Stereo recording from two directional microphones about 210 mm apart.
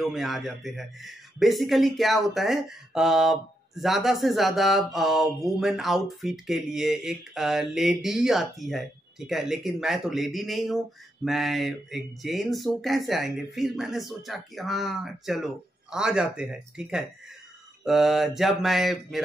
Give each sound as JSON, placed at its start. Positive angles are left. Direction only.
{"t": 0.0, "sound": "a man's voice", "side_deg": 0}